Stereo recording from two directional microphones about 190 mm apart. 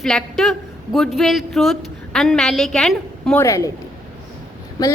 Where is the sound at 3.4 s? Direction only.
15° left (ahead or behind).